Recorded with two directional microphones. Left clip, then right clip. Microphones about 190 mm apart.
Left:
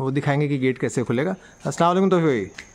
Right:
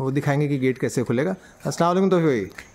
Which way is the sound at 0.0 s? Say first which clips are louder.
Left 1 dB; centre (ahead or behind).